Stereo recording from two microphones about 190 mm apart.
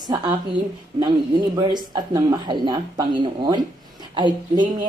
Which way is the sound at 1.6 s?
20° right (ahead or behind).